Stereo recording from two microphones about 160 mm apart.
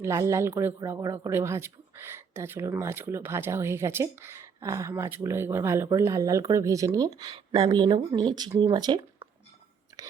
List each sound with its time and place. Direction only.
0.0 s speech: 20° right (ahead or behind)
9.9 s whispering: 15° right (ahead or behind)